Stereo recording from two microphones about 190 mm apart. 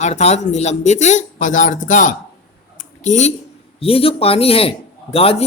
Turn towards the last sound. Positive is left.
turn(degrees=30)  # may be behind; listen again after turning